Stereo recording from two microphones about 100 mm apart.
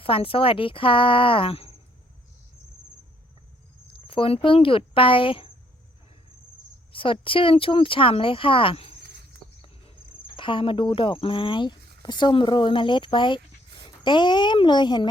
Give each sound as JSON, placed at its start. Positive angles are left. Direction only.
{"t": 0.0, "sound": "speech", "side_deg": 65}
{"t": 4.0, "sound": "speech", "side_deg": 65}
{"t": 6.9, "sound": "speech", "side_deg": 60}
{"t": 10.3, "sound": "a woman's voice", "side_deg": 60}